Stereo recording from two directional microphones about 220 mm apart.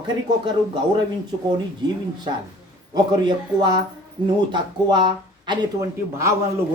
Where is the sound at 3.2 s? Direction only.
20° right (ahead or behind).